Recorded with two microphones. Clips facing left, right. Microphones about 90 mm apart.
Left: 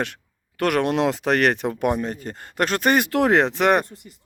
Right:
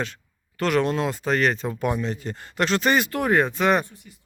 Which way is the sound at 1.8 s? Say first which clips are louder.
Left 1 dB; 55° left (ahead or behind).